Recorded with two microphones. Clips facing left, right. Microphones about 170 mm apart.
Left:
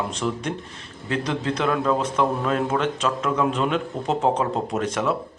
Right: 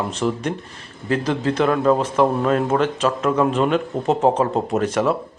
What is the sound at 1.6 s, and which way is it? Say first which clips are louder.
Speech: right 5 dB; 45° right (ahead or behind).